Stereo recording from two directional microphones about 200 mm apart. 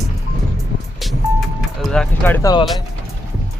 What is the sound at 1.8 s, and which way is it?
Speech, centre (ahead or behind).